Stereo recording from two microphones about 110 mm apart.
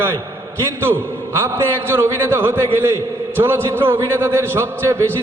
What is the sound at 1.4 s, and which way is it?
A man's voice, 20° right (ahead or behind).